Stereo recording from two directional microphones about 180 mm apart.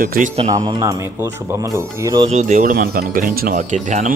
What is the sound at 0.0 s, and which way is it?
Speech, 50° right (ahead or behind).